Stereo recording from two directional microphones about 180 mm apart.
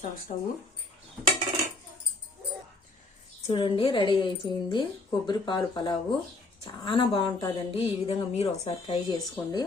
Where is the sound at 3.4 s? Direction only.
30° left (ahead or behind).